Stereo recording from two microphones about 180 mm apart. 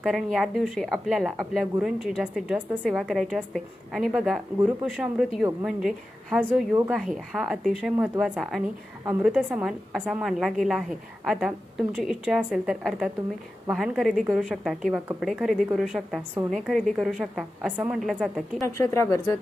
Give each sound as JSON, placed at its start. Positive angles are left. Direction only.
{"t": 0.0, "sound": "speech", "side_deg": 0}
{"t": 6.3, "sound": "speech", "side_deg": -5}
{"t": 18.6, "sound": "speech", "side_deg": 15}